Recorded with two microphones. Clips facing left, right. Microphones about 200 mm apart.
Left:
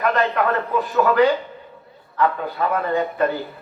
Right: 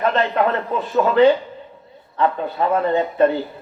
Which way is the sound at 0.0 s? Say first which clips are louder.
Right 2 dB; 25° right (ahead or behind).